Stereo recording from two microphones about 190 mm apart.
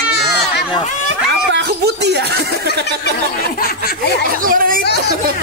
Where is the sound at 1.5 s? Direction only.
65° right (ahead or behind).